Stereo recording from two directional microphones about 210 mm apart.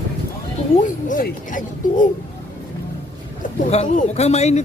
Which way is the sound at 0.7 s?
40° left (ahead or behind).